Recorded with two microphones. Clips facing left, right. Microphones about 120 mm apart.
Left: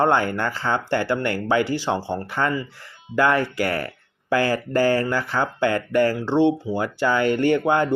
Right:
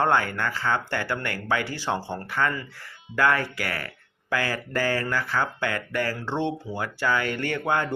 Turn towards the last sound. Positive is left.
turn(degrees=20)  # may be behind; listen again after turning